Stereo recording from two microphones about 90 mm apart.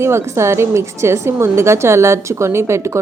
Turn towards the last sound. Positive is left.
turn(degrees=-35)  # may be behind; listen again after turning